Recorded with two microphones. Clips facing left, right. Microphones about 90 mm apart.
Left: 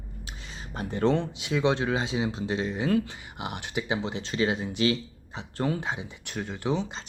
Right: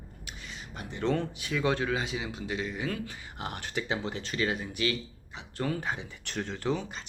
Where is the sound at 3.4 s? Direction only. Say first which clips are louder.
Left 2 dB; 15° left (ahead or behind).